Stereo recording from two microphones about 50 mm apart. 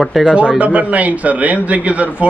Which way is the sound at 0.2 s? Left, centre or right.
Centre.